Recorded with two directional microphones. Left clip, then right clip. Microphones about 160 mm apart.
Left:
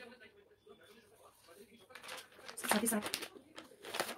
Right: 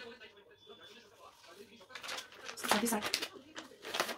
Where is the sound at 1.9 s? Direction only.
35° left (ahead or behind).